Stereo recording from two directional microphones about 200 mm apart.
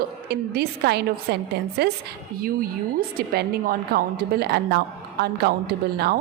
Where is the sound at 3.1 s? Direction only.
50° right (ahead or behind).